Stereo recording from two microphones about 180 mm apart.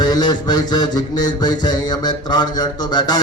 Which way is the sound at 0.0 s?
25° left (ahead or behind).